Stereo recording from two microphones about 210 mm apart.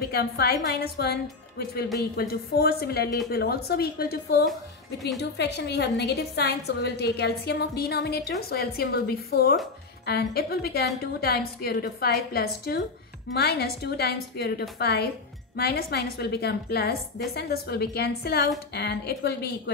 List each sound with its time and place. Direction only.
0.1 s a woman's voice: 50° left (ahead or behind)
2.1 s a woman's voice: 50° left (ahead or behind)